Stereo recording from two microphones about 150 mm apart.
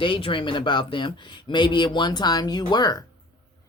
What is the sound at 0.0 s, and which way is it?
Speech, 35° left (ahead or behind).